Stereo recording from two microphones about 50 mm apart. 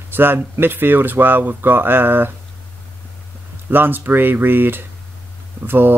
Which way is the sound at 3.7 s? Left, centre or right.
Right.